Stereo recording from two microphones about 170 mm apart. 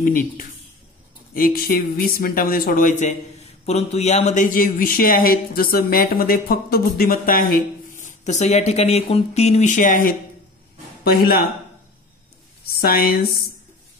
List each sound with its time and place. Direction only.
0.0 s speech: 55° left (ahead or behind)
12.8 s speech: 60° left (ahead or behind)